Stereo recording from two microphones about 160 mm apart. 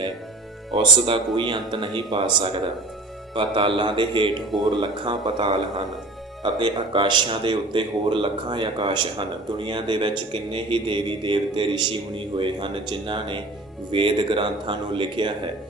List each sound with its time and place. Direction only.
0.7 s speech: 30° right (ahead or behind)